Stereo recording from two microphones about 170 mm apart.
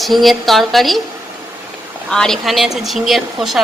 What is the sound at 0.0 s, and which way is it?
A woman's voice, centre (ahead or behind).